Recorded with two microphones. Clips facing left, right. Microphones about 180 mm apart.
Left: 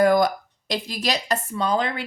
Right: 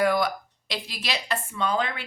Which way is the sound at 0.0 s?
45° left (ahead or behind).